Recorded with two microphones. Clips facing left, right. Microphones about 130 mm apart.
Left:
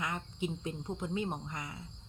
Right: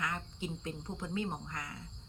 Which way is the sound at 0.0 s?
20° left (ahead or behind).